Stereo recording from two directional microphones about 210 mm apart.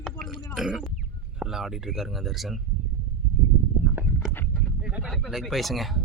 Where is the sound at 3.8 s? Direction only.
10° left (ahead or behind).